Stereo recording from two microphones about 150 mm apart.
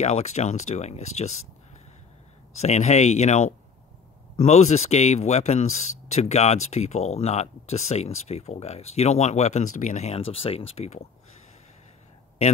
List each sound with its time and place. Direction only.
0.0 s speech: 50° left (ahead or behind)
2.6 s speech: 45° left (ahead or behind)